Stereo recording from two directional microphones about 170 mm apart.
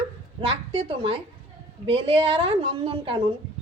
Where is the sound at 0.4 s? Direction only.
30° right (ahead or behind).